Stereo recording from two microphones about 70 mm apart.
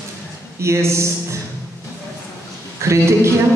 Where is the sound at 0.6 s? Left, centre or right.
Right.